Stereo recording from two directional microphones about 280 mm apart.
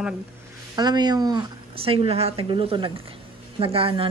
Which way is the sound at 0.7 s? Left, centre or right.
Centre.